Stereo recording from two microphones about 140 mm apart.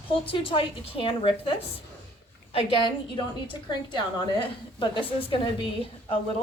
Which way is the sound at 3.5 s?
35° left (ahead or behind).